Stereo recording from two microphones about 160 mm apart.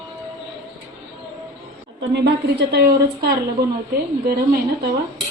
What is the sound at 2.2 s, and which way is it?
A woman's voice, 90° right.